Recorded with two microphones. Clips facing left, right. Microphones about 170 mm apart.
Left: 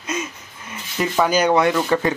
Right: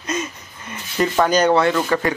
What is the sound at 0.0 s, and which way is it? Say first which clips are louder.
Speech: right 2 dB; 5° left (ahead or behind).